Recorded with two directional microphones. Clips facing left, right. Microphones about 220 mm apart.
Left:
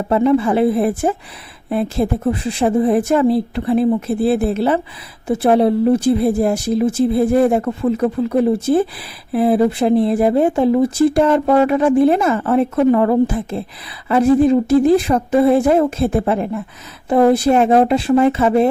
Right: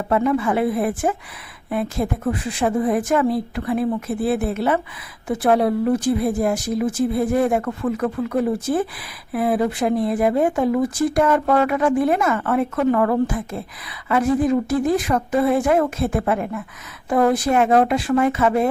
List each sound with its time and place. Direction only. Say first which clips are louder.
0.1 s speech: left 5 dB; 30° left (ahead or behind)